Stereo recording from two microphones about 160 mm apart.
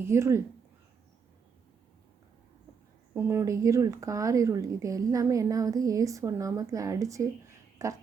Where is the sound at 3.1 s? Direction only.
15° right (ahead or behind).